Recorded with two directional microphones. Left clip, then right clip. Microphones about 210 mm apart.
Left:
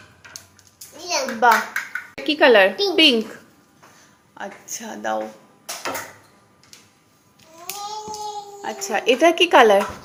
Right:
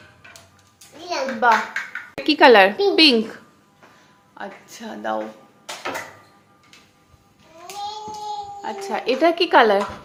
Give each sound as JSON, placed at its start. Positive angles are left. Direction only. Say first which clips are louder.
{"t": 1.0, "sound": "hands", "louder": "left 1 dB", "side_deg": 10}
{"t": 2.2, "sound": "a woman's voice", "louder": "right 2 dB", "side_deg": -25}
{"t": 4.4, "sound": "a woman's voice", "louder": "left 2 dB", "side_deg": 10}
{"t": 8.9, "sound": "a woman's voice", "louder": "left 3 dB", "side_deg": 10}